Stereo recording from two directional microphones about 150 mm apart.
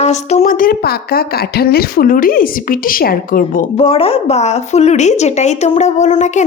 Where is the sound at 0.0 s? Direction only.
45° left (ahead or behind); by 3.7 s 70° left (ahead or behind).